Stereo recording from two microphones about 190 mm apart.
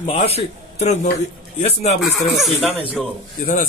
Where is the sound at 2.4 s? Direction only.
5° left (ahead or behind).